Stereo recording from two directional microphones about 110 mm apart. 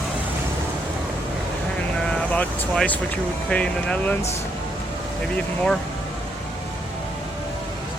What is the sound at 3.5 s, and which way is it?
Speech, 10° left (ahead or behind).